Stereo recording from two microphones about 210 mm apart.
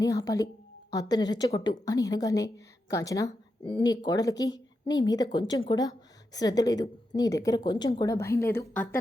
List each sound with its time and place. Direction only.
0.0 s a woman's voice: 15° left (ahead or behind)